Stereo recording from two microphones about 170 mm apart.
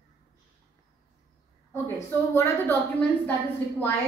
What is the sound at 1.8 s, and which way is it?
A man's voice, 15° left (ahead or behind).